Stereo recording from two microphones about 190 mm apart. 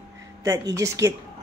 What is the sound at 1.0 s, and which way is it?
Speech, 20° right (ahead or behind).